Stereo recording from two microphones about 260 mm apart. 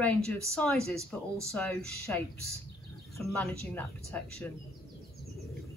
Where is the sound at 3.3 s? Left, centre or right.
Centre.